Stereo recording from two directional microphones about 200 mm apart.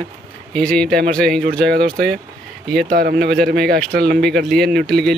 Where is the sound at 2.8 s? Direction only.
50° right (ahead or behind).